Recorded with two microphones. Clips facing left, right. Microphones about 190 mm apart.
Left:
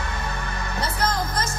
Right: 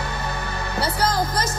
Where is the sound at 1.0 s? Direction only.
35° right (ahead or behind).